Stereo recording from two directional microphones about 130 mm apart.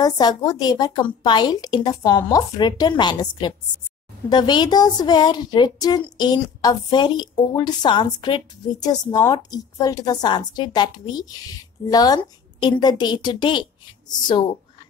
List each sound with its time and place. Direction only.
0.0 s a woman's voice: 30° left (ahead or behind)